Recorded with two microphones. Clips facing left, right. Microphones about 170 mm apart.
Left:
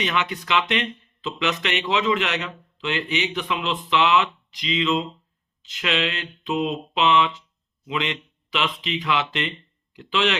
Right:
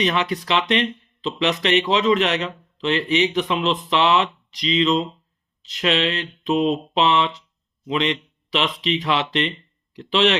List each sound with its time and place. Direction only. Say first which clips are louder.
0.0 s speech: right 4 dB; 35° right (ahead or behind)